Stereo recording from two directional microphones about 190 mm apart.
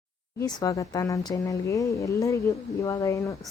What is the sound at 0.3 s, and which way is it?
Speech, 20° left (ahead or behind).